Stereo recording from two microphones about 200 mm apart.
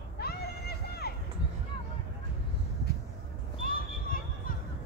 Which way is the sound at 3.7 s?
45° left (ahead or behind).